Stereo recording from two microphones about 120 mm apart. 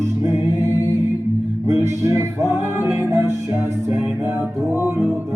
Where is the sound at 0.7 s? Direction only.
30° left (ahead or behind).